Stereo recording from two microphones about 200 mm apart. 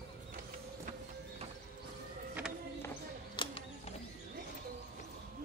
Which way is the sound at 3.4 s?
25° left (ahead or behind).